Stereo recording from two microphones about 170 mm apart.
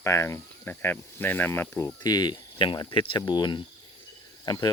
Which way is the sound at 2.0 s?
25° left (ahead or behind).